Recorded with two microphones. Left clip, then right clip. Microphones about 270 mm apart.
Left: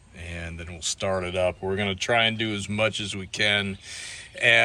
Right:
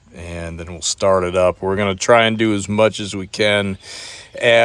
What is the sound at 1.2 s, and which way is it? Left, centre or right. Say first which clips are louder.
Speech: right 10 dB; right.